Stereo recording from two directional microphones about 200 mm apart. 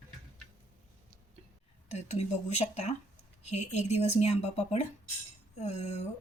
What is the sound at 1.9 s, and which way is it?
Speech, 35° left (ahead or behind).